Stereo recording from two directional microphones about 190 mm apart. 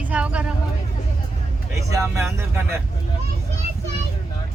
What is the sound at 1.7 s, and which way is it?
Speech, 15° right (ahead or behind).